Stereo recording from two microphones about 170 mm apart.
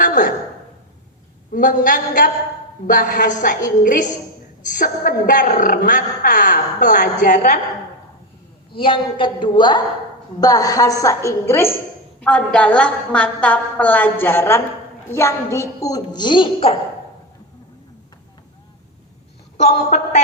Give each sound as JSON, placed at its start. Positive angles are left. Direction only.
{"t": 0.0, "sound": "a sound", "side_deg": 55}
{"t": 1.5, "sound": "a woman's voice", "side_deg": 50}
{"t": 8.7, "sound": "a woman's voice", "side_deg": 30}
{"t": 19.6, "sound": "a woman's voice", "side_deg": 45}